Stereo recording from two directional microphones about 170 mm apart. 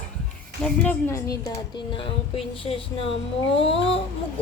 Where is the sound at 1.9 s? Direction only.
30° left (ahead or behind).